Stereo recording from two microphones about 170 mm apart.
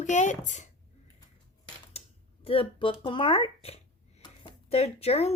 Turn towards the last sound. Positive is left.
turn(degrees=35)  # may be behind; listen again after turning